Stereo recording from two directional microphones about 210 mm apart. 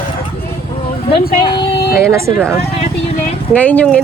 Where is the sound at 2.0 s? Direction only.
15° right (ahead or behind).